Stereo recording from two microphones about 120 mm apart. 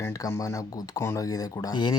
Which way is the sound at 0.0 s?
25° left (ahead or behind).